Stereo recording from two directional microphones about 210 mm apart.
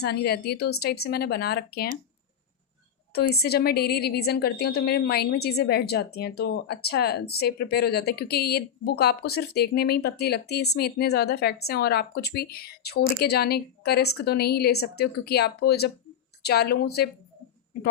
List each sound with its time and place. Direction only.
0.0 s speech: 50° left (ahead or behind)
3.1 s speech: 50° left (ahead or behind)